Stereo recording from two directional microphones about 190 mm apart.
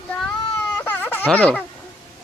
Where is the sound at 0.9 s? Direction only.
10° left (ahead or behind).